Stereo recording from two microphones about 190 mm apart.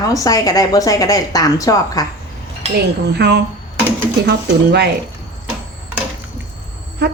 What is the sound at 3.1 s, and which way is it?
A woman's voice, 60° right (ahead or behind).